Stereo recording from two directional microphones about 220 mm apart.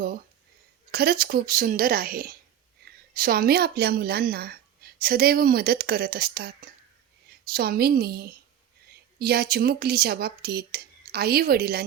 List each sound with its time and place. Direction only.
0.9 s a woman's voice: 45° right (ahead or behind)